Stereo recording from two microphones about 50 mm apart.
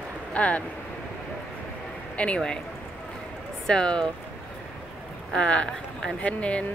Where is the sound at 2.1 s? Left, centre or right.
Left.